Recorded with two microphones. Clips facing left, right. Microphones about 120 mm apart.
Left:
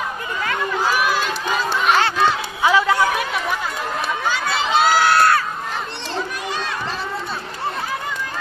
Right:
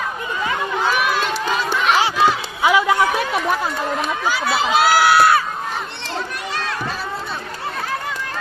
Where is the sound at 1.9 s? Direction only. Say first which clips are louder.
Right 1 dB; 10° right (ahead or behind).